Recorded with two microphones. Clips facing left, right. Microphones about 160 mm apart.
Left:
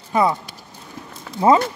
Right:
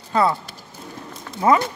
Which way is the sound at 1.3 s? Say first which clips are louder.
Left 2 dB; 25° left (ahead or behind).